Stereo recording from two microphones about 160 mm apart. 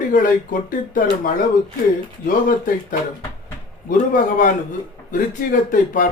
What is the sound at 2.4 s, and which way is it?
Speech, 55° left (ahead or behind).